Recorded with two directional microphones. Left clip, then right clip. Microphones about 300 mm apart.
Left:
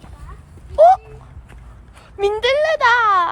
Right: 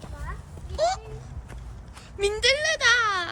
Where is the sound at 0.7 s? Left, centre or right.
Centre.